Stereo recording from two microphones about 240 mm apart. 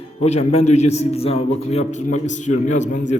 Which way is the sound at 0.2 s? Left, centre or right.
Left.